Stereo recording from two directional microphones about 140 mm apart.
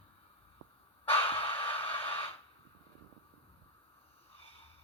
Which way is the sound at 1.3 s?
40° left (ahead or behind).